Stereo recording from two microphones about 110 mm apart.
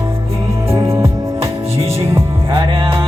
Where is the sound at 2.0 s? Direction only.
25° right (ahead or behind).